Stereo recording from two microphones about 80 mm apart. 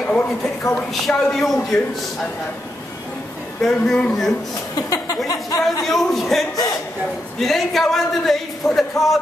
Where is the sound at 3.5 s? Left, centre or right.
Centre.